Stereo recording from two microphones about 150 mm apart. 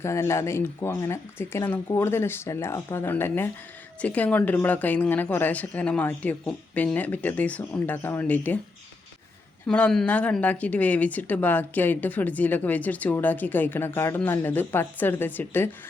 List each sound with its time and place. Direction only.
0.0 s speech: 20° left (ahead or behind)
9.6 s speech: 5° left (ahead or behind)